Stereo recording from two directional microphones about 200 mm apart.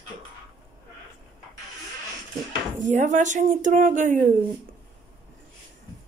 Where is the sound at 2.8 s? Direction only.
35° right (ahead or behind).